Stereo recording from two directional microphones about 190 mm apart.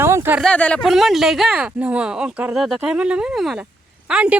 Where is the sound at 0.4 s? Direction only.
5° left (ahead or behind).